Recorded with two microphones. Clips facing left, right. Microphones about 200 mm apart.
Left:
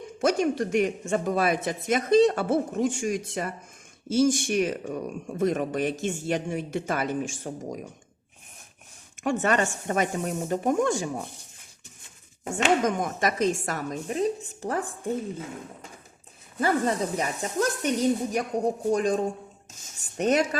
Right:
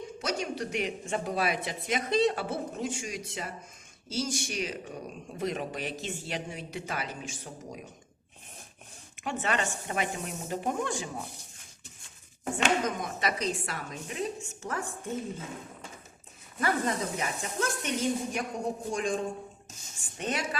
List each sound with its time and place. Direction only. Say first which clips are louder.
0.2 s speech: left 10 dB; 50° left (ahead or behind)
9.1 s speech: left 7 dB; 45° left (ahead or behind)
12.8 s a woman's voice: left 6 dB; 45° left (ahead or behind)
16.6 s a woman's voice: left 5 dB; 35° left (ahead or behind)